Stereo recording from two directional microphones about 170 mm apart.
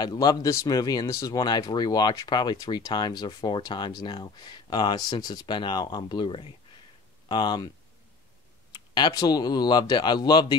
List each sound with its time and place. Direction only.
0.0 s speech: 25° left (ahead or behind)
8.7 s speech: 25° left (ahead or behind)